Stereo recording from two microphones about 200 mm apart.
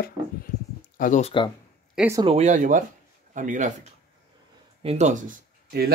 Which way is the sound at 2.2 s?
35° right (ahead or behind).